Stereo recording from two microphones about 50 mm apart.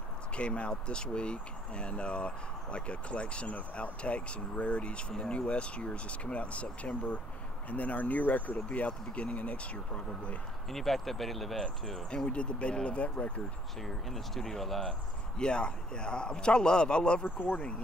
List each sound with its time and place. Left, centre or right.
0.4 s speech: left
10.7 s speech: centre
12.3 s speech: left
13.7 s speech: centre
14.9 s speech: centre
17.2 s speech: left